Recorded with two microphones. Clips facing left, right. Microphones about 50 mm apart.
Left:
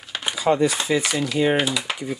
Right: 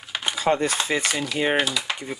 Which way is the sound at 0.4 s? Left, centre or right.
Right.